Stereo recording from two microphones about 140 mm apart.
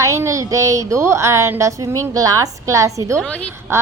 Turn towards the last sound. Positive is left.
turn(degrees=-20)  # may be behind; listen again after turning